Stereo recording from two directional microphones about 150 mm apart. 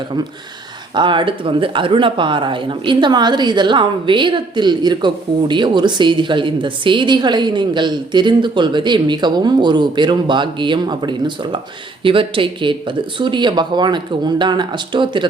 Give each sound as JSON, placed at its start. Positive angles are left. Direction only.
{"t": 0.9, "sound": "speech", "side_deg": -30}